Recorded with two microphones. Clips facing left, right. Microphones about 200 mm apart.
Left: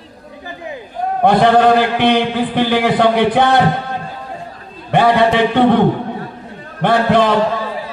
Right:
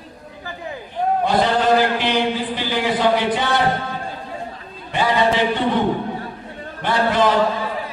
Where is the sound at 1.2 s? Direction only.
60° left (ahead or behind).